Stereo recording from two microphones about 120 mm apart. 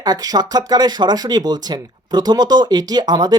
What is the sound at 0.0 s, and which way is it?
Speech, 35° right (ahead or behind).